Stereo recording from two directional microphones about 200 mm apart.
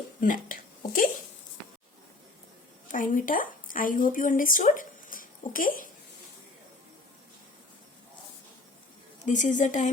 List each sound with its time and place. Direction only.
0.2 s a sound: 45° left (ahead or behind)
2.9 s speech: 40° left (ahead or behind)
9.2 s a woman's voice: 40° left (ahead or behind)